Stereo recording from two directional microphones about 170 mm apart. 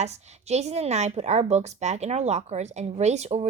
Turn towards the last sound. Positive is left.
turn(degrees=-40)  # may be behind; listen again after turning